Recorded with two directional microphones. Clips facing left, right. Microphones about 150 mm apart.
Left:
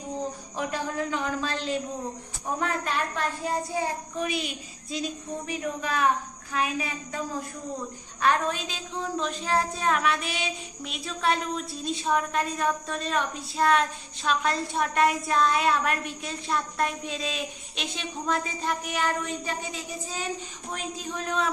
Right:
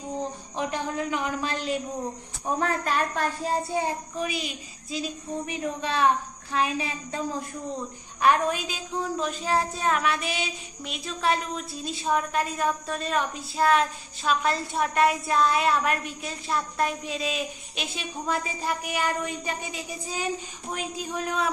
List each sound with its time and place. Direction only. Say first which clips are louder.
0.6 s speech: right 1 dB; 20° right (ahead or behind)
2.8 s speech: right 3 dB; 40° right (ahead or behind)
4.2 s child singing: left 3 dB; centre (ahead or behind)
5.5 s a woman's voice: left 1 dB; 30° right (ahead or behind)
8.2 s speech: right 3 dB; 10° right (ahead or behind)
9.2 s child singing: even; 5° right (ahead or behind)
20.7 s speech: right 2 dB; 10° right (ahead or behind)